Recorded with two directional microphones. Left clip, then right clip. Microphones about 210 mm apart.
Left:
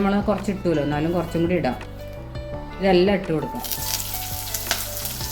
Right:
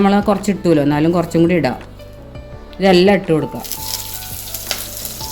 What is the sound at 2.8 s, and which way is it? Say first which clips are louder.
Speech: right 7 dB; 55° right (ahead or behind).